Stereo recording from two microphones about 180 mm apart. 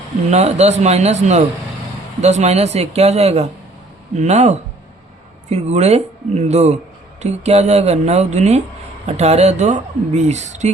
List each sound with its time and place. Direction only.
0.3 s speech: 40° right (ahead or behind)